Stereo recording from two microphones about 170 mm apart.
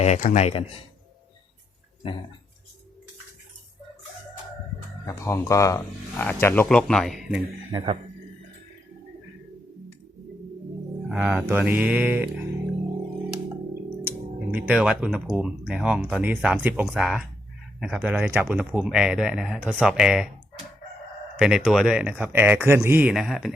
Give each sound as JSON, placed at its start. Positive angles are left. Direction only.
{"t": 0.0, "sound": "speech", "side_deg": 45}
{"t": 5.0, "sound": "speech", "side_deg": 15}
{"t": 7.7, "sound": "speech", "side_deg": -25}
{"t": 11.1, "sound": "speech", "side_deg": -5}
{"t": 14.5, "sound": "speech", "side_deg": -5}
{"t": 21.3, "sound": "speech", "side_deg": -5}